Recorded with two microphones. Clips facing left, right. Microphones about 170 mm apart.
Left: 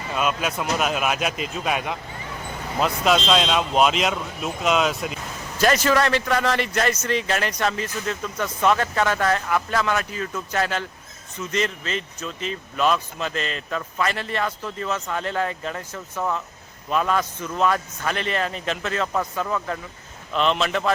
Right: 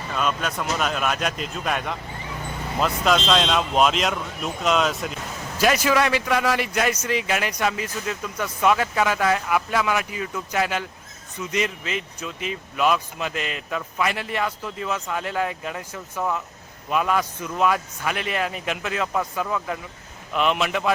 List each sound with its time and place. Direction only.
0.1 s speech: 5° left (ahead or behind)
5.5 s a man's voice: 10° right (ahead or behind)